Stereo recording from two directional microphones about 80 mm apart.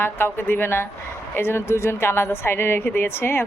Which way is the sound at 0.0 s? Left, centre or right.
Left.